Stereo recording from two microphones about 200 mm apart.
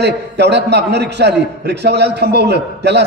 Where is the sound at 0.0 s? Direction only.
55° right (ahead or behind).